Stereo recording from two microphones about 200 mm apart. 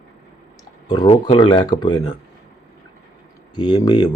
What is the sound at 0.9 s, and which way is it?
Speech, 20° left (ahead or behind).